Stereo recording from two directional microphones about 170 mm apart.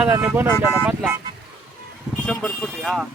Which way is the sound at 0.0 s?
15° right (ahead or behind).